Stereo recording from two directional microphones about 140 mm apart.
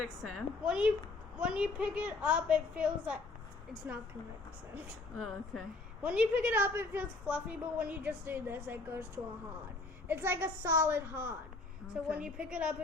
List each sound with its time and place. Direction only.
0.0 s a woman's voice: 5° right (ahead or behind)
6.0 s a woman's voice: 10° right (ahead or behind)